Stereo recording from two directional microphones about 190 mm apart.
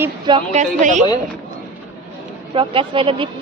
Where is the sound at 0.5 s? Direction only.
40° right (ahead or behind).